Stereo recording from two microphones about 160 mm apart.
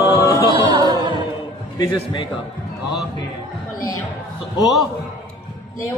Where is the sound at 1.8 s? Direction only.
30° left (ahead or behind).